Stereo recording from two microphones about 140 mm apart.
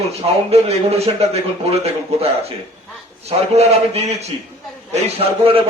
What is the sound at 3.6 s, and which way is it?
A man's voice, 50° right (ahead or behind).